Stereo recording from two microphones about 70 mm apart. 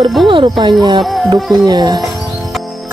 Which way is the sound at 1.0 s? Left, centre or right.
Centre.